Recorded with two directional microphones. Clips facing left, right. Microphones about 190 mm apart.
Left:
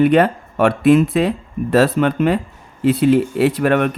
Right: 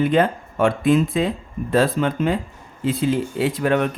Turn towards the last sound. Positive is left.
turn(degrees=65)  # may be behind; listen again after turning